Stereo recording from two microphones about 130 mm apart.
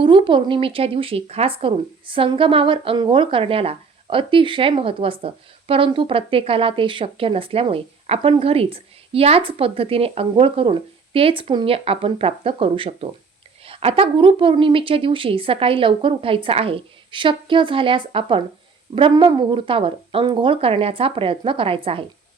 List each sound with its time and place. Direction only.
0.0 s speech: 40° right (ahead or behind)